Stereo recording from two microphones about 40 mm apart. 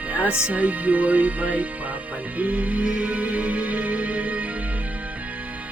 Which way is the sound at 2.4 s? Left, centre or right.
Right.